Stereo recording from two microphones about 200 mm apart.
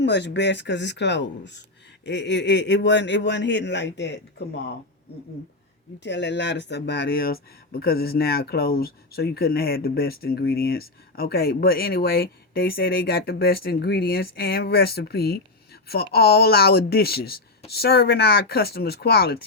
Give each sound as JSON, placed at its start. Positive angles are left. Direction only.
{"t": 0.0, "sound": "a man's voice", "side_deg": 60}
{"t": 6.0, "sound": "speech", "side_deg": 60}